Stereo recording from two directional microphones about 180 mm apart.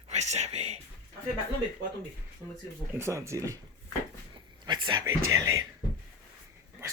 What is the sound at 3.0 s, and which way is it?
Speech, 15° right (ahead or behind).